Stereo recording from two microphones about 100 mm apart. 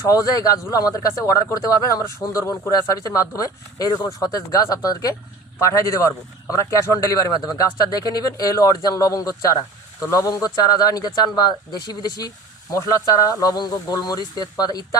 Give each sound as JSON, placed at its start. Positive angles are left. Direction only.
{"t": 0.0, "sound": "speech", "side_deg": 40}
{"t": 5.5, "sound": "speech", "side_deg": 30}